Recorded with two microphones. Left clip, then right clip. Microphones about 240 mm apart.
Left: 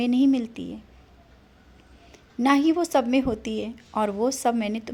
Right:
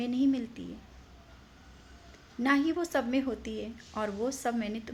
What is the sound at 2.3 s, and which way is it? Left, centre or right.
A woman's voice, left.